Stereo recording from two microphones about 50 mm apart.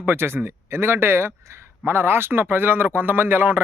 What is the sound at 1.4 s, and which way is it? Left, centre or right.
Speech, right.